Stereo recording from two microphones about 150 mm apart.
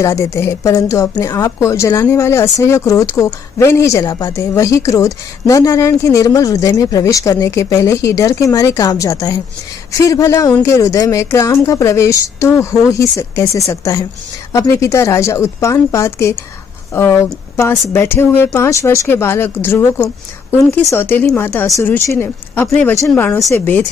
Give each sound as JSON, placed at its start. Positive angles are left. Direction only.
{"t": 0.0, "sound": "a woman's voice", "side_deg": 20}